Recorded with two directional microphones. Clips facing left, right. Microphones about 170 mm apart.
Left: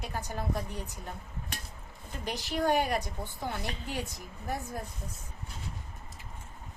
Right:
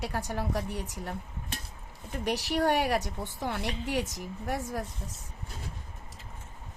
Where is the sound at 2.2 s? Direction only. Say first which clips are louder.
Right 4 dB; 75° right (ahead or behind).